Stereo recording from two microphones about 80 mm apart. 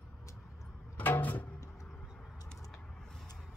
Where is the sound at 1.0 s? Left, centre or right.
Left.